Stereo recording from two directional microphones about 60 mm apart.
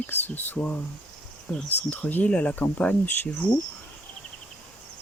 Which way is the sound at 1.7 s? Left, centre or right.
Left.